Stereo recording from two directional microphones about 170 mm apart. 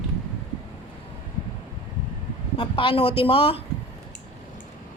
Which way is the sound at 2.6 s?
30° left (ahead or behind).